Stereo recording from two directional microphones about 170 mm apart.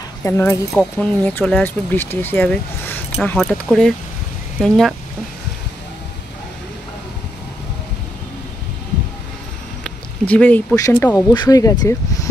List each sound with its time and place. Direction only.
0.2 s speech: 15° left (ahead or behind)
4.6 s speech: centre (ahead or behind)
9.8 s speech: 10° left (ahead or behind)